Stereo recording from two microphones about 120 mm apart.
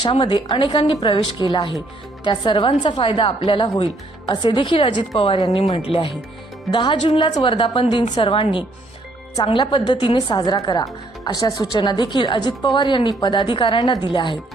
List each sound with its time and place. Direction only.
0.0 s a woman's voice: 45° left (ahead or behind)